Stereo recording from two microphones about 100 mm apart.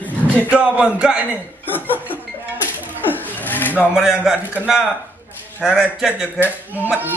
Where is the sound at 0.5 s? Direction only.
10° right (ahead or behind).